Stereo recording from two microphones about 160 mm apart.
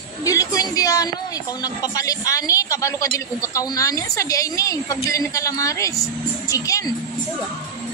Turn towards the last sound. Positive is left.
turn(degrees=20)  # may be behind; listen again after turning